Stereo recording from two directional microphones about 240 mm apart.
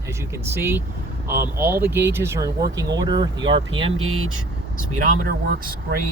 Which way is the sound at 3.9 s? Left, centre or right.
Right.